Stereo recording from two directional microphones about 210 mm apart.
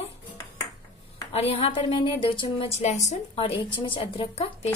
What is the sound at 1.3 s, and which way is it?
A woman's voice, 30° left (ahead or behind).